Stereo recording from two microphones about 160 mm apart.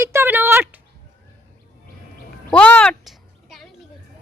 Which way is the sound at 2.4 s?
10° left (ahead or behind).